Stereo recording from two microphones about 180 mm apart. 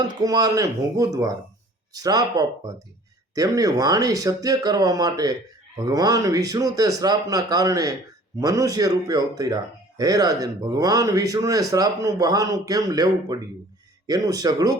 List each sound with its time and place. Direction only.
0.1 s speech: 20° right (ahead or behind)